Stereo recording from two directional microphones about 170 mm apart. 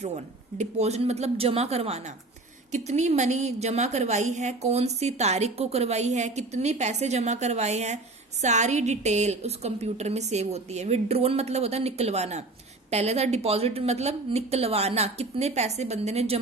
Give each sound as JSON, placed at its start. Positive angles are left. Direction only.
{"t": 0.6, "sound": "a woman's voice", "side_deg": -40}